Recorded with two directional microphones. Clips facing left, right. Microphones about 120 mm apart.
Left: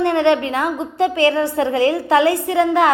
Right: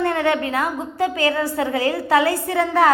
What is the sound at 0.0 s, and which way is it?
A woman's voice, 25° left (ahead or behind).